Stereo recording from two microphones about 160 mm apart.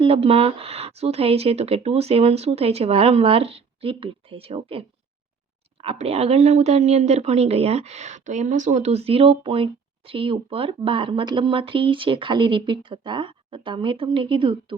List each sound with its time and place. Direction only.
0.0 s speech: 35° right (ahead or behind)